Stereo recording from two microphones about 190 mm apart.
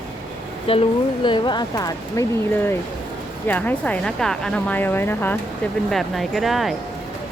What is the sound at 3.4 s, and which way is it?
Speech, 10° left (ahead or behind).